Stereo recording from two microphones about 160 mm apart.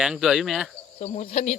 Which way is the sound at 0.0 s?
5° right (ahead or behind).